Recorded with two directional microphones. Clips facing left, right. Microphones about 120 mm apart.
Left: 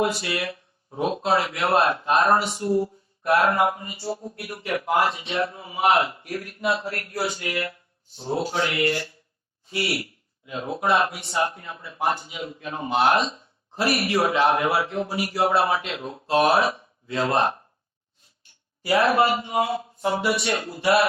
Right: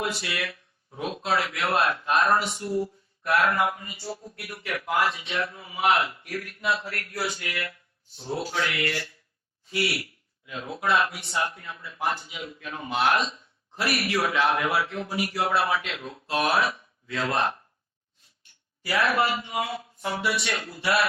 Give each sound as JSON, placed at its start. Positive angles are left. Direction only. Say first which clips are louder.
{"t": 0.0, "sound": "a man's voice", "louder": "left 6 dB", "side_deg": 30}
{"t": 18.5, "sound": "a sound", "louder": "left 2 dB", "side_deg": 25}
{"t": 18.9, "sound": "a man's voice", "louder": "left 5 dB", "side_deg": 25}